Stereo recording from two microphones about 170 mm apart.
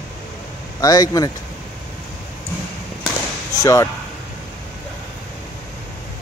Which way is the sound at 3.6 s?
20° left (ahead or behind).